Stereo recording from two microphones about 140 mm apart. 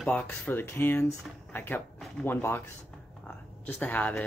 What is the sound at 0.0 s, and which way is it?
Speech, 10° left (ahead or behind).